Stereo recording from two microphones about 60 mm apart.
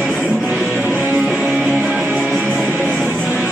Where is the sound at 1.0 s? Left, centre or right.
Right.